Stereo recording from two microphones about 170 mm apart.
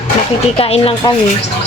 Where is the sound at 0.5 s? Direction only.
35° left (ahead or behind).